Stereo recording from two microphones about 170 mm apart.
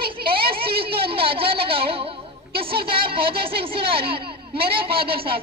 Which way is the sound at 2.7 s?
65° right (ahead or behind).